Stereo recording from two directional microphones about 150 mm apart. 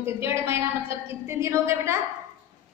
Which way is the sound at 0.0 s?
15° right (ahead or behind).